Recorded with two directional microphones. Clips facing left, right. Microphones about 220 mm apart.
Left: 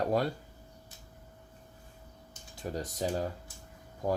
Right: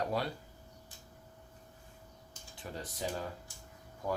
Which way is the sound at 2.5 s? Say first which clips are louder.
Left 7 dB; 40° left (ahead or behind).